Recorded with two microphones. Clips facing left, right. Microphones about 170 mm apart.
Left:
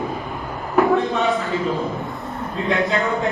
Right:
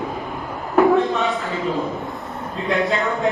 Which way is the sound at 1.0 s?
Centre (ahead or behind).